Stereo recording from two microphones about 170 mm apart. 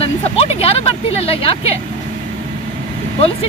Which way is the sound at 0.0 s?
35° left (ahead or behind).